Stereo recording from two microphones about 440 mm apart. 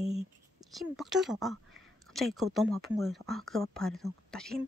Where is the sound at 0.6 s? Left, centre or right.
Centre.